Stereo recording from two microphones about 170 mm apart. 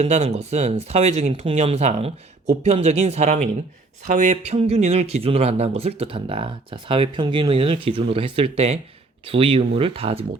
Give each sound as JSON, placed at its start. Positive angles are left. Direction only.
{"t": 0.0, "sound": "speech", "side_deg": -40}